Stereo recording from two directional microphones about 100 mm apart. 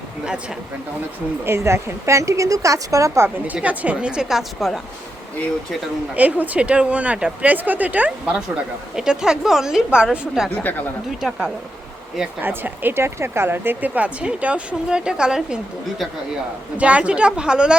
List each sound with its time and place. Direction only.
1.5 s speech: 25° right (ahead or behind)
3.2 s speech: 15° right (ahead or behind)
6.1 s a woman's voice: 15° right (ahead or behind)
10.6 s speech: 15° left (ahead or behind)
11.2 s a woman's voice: 5° right (ahead or behind)
12.4 s speech: 20° right (ahead or behind)
16.7 s speech: 15° right (ahead or behind)